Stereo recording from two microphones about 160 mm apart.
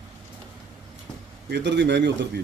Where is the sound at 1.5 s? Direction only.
90° right.